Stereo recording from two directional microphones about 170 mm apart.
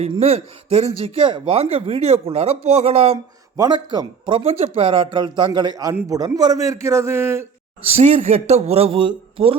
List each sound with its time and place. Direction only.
0.1 s speech: 35° right (ahead or behind)
3.6 s a man's voice: 25° right (ahead or behind)
7.9 s speech: 35° right (ahead or behind)